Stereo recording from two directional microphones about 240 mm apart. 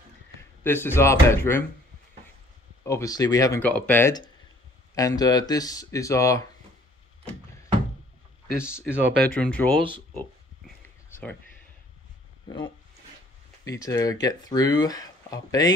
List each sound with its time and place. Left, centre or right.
0.7 s speech: centre
2.8 s speech: centre
8.5 s speech: centre
12.4 s speech: centre